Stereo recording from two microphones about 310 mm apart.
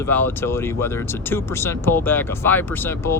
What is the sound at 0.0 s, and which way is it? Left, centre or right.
Speech, centre.